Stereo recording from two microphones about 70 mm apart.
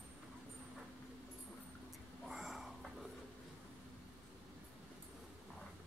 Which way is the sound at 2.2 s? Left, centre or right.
Centre.